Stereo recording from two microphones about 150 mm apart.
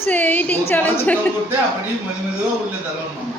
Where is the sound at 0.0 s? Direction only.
10° left (ahead or behind).